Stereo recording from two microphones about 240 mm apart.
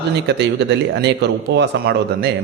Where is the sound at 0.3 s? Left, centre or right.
Right.